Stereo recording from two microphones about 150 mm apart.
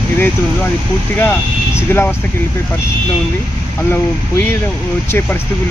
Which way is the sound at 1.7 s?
15° left (ahead or behind).